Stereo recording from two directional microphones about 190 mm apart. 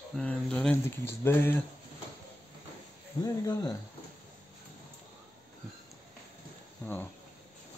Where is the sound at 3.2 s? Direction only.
20° left (ahead or behind).